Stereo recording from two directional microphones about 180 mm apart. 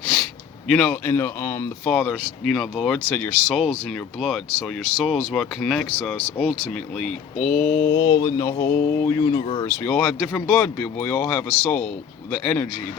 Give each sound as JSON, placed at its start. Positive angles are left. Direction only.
{"t": 0.7, "sound": "speech", "side_deg": 5}
{"t": 1.1, "sound": "speech", "side_deg": 15}
{"t": 7.9, "sound": "mantra", "side_deg": 25}
{"t": 9.8, "sound": "speech", "side_deg": 10}